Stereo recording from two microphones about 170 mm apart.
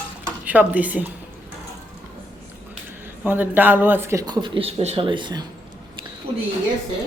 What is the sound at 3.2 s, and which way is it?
Speech, 10° right (ahead or behind).